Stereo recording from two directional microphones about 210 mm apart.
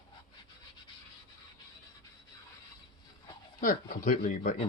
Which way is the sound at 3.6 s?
40° left (ahead or behind).